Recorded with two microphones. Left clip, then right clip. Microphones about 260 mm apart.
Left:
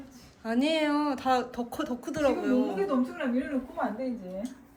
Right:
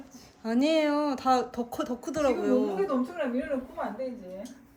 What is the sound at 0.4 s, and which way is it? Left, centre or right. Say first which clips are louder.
Speech: right 2 dB; right.